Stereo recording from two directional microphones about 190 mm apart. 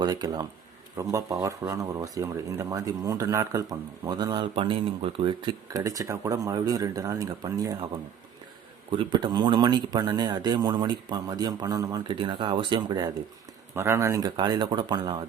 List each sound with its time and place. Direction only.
0.0 s speech: 20° right (ahead or behind)
8.9 s speech: 25° right (ahead or behind)